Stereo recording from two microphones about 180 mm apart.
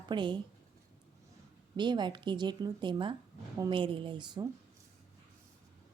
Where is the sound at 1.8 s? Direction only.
25° right (ahead or behind).